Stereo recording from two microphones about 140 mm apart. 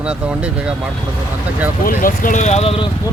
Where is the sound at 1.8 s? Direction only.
80° left; by 2.9 s 45° left (ahead or behind).